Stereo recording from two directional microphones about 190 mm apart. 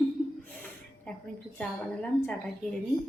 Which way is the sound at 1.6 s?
5° left (ahead or behind).